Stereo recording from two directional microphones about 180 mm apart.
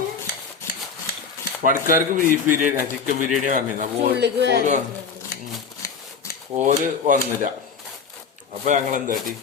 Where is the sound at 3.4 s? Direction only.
45° right (ahead or behind).